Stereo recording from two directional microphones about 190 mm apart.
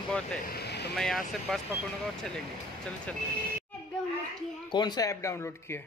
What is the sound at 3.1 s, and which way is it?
Speech, 5° left (ahead or behind).